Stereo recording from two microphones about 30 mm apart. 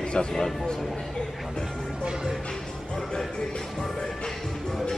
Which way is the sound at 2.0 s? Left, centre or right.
Right.